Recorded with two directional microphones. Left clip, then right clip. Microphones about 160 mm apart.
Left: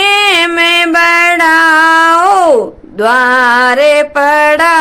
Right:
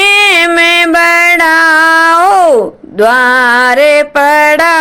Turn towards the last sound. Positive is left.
turn(degrees=-30)  # may be behind; listen again after turning